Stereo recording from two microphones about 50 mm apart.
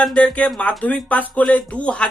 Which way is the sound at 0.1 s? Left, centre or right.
Left.